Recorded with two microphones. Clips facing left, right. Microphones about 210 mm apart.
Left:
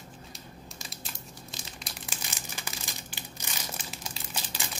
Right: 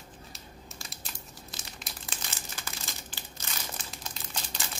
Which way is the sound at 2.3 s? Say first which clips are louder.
Left 1 dB; 15° left (ahead or behind).